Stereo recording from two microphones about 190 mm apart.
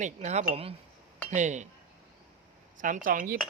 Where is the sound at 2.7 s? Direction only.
45° right (ahead or behind).